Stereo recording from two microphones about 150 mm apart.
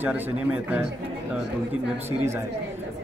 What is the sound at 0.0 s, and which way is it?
Speech, 10° right (ahead or behind).